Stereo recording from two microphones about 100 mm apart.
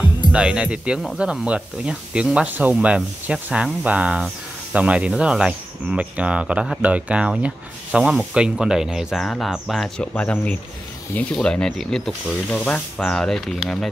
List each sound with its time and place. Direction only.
0.3 s speech: 10° right (ahead or behind)
9.2 s speech: 5° left (ahead or behind)
10.1 s speech: 15° left (ahead or behind)